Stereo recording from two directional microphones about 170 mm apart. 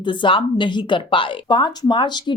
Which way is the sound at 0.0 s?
30° left (ahead or behind).